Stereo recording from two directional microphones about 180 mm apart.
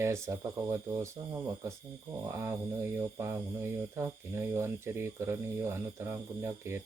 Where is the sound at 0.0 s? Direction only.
15° right (ahead or behind).